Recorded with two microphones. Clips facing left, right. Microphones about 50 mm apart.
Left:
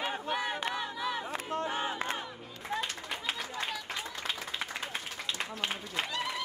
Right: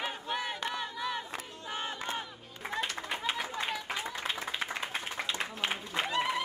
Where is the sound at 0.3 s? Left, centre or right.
Centre.